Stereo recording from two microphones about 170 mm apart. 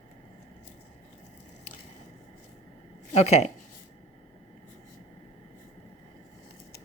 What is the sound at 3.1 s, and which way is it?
Speech, 40° left (ahead or behind).